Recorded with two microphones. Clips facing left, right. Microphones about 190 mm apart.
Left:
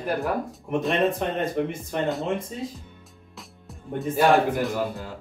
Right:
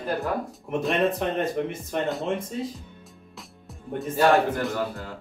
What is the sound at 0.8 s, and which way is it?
A man's voice, centre (ahead or behind).